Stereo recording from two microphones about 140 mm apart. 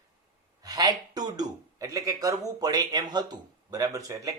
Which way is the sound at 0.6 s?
30° right (ahead or behind).